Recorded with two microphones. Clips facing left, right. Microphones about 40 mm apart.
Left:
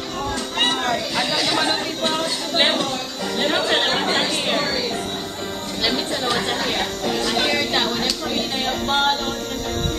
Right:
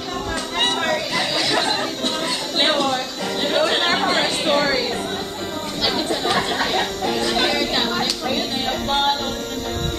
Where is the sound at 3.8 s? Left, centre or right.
Centre.